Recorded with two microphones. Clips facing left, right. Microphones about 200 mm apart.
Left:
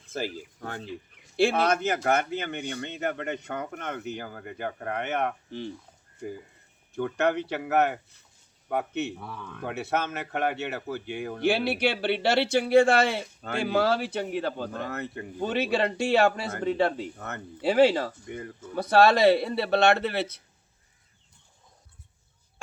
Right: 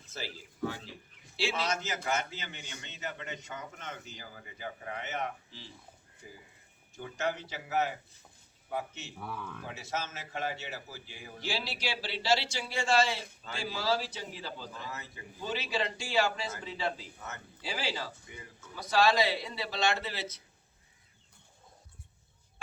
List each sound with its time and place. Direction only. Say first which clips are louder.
0.1 s a man's voice: left 10 dB; 50° left (ahead or behind)
9.2 s speech: left 1 dB; 5° right (ahead or behind)
9.6 s a man's voice: left 11 dB; 60° left (ahead or behind)